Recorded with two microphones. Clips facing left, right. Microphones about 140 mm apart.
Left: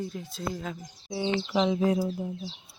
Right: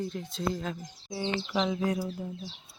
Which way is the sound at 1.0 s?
15° left (ahead or behind).